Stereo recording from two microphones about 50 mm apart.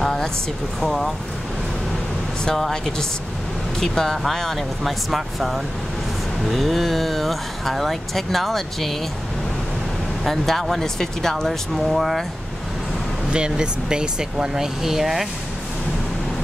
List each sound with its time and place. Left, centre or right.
0.0 s a sound: centre
0.7 s speech: centre
2.4 s speech: centre
10.2 s speech: centre
11.7 s speech: centre
13.3 s speech: centre